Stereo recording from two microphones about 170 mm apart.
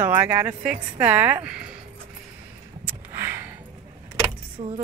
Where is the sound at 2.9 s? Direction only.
15° right (ahead or behind).